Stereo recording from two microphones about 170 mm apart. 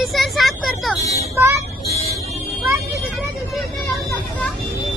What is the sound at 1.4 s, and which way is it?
Vehicle, 15° right (ahead or behind).